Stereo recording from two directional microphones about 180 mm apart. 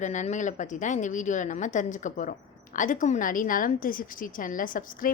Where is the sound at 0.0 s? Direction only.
40° left (ahead or behind).